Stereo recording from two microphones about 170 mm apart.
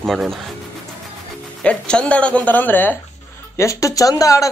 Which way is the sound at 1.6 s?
5° left (ahead or behind).